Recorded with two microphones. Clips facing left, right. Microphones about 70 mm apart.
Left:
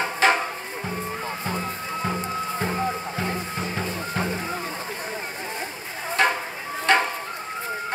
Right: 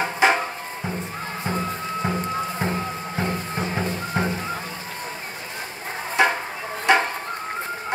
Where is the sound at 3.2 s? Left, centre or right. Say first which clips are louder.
Right 2 dB; right.